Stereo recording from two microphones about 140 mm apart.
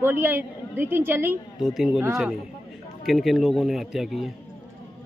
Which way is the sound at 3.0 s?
Centre (ahead or behind).